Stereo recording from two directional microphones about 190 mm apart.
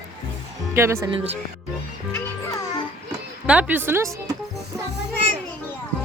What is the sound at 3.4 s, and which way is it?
Speech, 10° right (ahead or behind).